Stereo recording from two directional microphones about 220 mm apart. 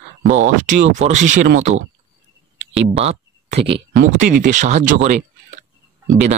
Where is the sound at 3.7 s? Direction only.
50° right (ahead or behind).